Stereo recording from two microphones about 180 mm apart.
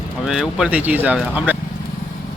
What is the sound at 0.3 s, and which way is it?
Speech, centre (ahead or behind).